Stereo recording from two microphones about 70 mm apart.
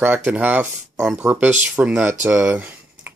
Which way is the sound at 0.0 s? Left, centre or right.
Right.